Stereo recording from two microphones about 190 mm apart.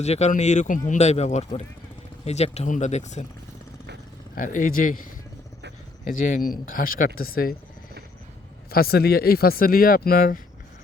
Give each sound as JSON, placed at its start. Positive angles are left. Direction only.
{"t": 0.0, "sound": "speech", "side_deg": 35}
{"t": 4.4, "sound": "speech", "side_deg": 45}
{"t": 6.1, "sound": "speech", "side_deg": 45}
{"t": 8.7, "sound": "speech", "side_deg": 55}